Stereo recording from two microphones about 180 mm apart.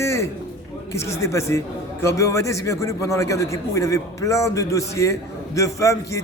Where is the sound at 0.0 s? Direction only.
15° left (ahead or behind).